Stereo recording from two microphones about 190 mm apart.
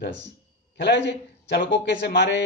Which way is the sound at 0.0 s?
70° left (ahead or behind).